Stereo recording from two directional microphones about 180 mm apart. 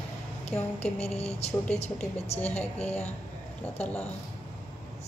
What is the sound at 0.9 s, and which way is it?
A woman's voice, 35° left (ahead or behind).